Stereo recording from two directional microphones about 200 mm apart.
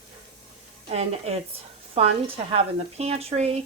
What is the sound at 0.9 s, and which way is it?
Speech, 30° right (ahead or behind).